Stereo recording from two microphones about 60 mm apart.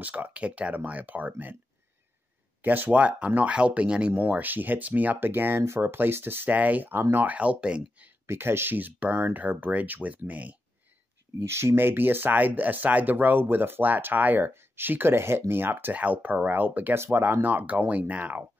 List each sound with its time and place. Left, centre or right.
0.0 s speech: right
2.6 s speech: right
2.9 s speech: right
6.9 s speech: right
7.2 s speech: centre
8.3 s speech: right
11.3 s speech: right
16.9 s speech: right